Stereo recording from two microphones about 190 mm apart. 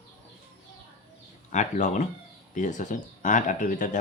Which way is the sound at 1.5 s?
40° left (ahead or behind).